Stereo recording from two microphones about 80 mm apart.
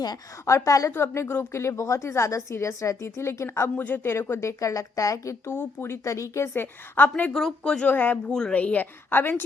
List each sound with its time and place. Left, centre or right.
0.4 s a woman's voice: left
0.9 s a woman's voice: left
5.5 s a woman's voice: left
6.5 s a woman's voice: left
7.6 s speech: centre
7.9 s a woman's voice: left
8.3 s a woman's voice: centre; by 9.3 s left